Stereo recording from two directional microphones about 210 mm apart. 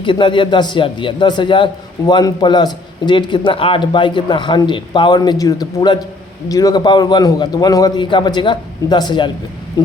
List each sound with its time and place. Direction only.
0.0 s a man's voice: 25° left (ahead or behind)